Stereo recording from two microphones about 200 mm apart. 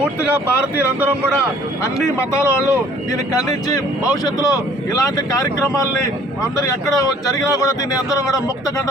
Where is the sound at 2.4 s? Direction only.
15° left (ahead or behind).